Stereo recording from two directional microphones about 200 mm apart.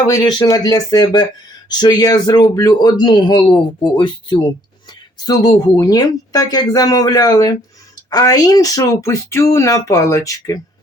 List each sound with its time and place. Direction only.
0.1 s speech: 20° left (ahead or behind)